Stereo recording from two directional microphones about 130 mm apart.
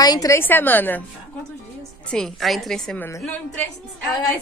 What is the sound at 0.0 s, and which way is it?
Speech, 30° left (ahead or behind).